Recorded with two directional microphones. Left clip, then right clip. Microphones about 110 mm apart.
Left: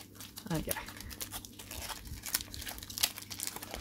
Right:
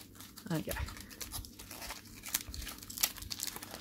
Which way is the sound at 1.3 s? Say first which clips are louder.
Left 2 dB; 30° left (ahead or behind).